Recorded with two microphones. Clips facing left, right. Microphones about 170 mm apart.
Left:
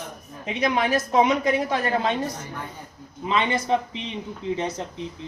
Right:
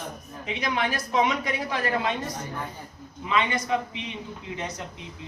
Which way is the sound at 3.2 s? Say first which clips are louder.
Left 3 dB; 30° left (ahead or behind).